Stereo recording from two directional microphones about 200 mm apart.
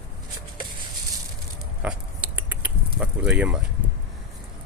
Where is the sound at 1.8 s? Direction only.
5° right (ahead or behind).